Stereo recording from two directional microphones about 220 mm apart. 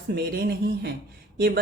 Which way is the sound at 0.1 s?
45° right (ahead or behind).